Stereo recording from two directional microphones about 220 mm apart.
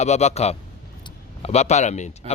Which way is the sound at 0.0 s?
30° left (ahead or behind).